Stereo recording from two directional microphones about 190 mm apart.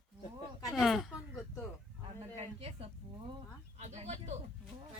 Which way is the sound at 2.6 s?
30° right (ahead or behind).